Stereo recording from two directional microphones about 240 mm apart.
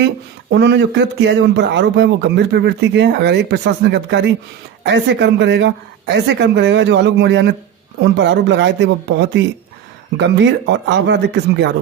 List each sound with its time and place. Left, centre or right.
0.5 s speech: right